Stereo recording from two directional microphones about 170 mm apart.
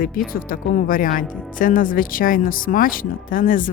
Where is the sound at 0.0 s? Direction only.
55° left (ahead or behind).